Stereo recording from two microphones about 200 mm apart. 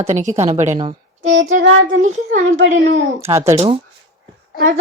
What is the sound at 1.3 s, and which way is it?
Child singing, 70° right (ahead or behind).